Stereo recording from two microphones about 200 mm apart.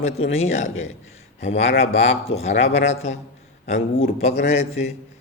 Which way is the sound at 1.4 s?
30° left (ahead or behind).